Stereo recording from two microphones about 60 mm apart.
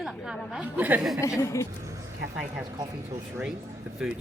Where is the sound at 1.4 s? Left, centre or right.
Left.